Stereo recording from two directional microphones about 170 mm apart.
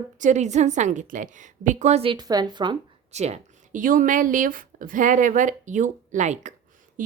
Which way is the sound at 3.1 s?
40° right (ahead or behind).